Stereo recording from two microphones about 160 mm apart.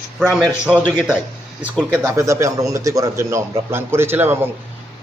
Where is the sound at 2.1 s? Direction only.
20° right (ahead or behind).